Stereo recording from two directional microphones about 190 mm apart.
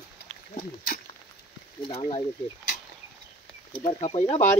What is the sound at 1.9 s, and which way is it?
Speech, 30° left (ahead or behind).